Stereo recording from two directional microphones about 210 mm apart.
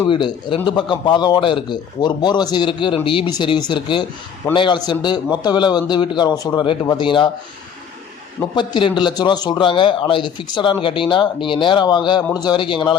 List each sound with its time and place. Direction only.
0.1 s speech: 20° left (ahead or behind)
8.5 s speech: 20° left (ahead or behind)